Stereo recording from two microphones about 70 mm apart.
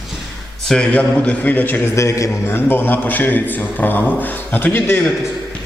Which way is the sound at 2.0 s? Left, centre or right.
Left.